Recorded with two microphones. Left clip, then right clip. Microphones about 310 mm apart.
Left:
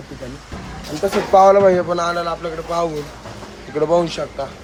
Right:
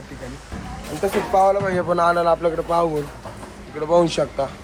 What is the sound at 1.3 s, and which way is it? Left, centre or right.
Speech, left.